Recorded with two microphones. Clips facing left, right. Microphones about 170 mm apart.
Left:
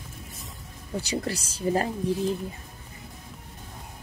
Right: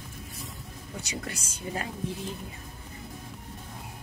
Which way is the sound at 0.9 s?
30° left (ahead or behind).